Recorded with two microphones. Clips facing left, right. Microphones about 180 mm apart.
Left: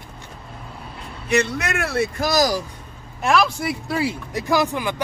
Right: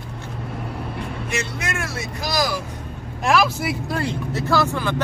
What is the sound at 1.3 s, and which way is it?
A man's voice, 65° left (ahead or behind).